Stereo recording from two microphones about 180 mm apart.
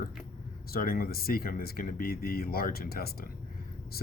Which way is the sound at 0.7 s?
55° left (ahead or behind).